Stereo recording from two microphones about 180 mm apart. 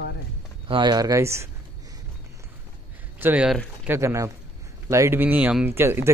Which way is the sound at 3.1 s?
10° right (ahead or behind).